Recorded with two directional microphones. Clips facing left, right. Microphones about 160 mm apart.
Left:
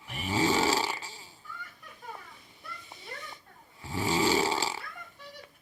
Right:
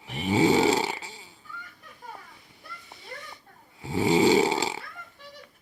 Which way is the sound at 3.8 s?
25° right (ahead or behind).